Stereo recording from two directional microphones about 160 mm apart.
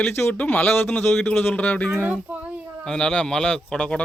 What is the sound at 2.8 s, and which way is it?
Speech, 5° left (ahead or behind).